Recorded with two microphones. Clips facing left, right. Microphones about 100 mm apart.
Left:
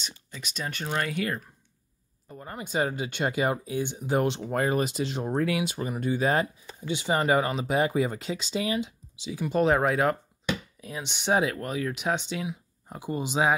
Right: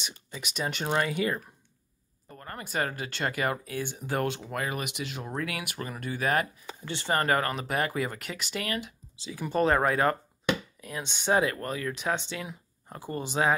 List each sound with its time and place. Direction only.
0.0 s speech: 15° right (ahead or behind)
1.0 s speech: 5° right (ahead or behind)
2.2 s speech: 10° left (ahead or behind)
4.5 s speech: 35° left (ahead or behind)
6.6 s speech: 80° right
6.9 s speech: 15° left (ahead or behind)
9.4 s speech: 5° left (ahead or behind)